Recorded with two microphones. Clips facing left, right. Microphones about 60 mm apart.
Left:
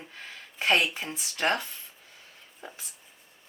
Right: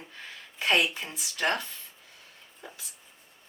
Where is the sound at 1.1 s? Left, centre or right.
Left.